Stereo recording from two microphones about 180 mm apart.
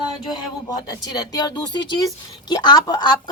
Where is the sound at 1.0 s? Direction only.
20° left (ahead or behind).